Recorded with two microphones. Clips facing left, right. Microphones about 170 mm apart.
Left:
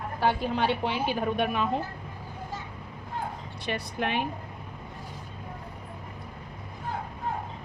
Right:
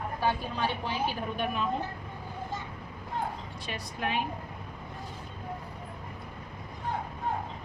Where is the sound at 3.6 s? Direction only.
65° left (ahead or behind).